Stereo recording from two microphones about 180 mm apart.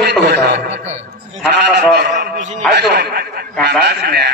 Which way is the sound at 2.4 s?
40° right (ahead or behind).